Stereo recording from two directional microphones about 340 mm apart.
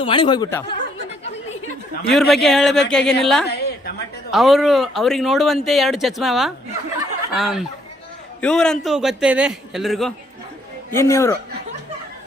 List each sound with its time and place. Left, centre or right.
0.0 s speech: centre
2.1 s a man's voice: centre
3.5 s a sound: left
4.3 s a man's voice: centre